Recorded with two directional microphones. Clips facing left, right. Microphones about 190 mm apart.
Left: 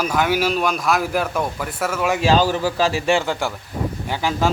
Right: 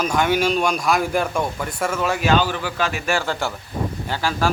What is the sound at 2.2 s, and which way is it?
Speech, 35° left (ahead or behind).